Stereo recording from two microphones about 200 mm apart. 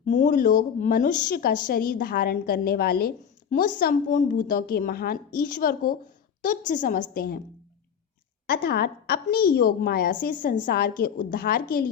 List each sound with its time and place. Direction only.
0.0 s a woman's voice: 40° left (ahead or behind)
8.4 s a woman's voice: 55° left (ahead or behind)